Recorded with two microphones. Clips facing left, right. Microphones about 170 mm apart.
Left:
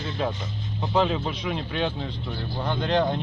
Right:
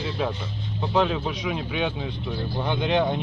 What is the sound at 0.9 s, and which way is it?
Speech, centre (ahead or behind).